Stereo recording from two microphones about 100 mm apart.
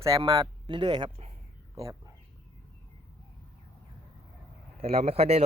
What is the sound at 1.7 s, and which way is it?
Speech, 35° right (ahead or behind).